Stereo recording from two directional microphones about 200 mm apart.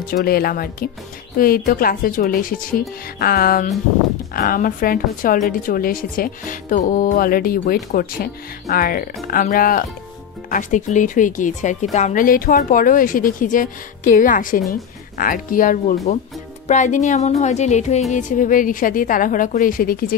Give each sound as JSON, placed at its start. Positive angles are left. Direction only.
{"t": 0.0, "sound": "speech", "side_deg": 45}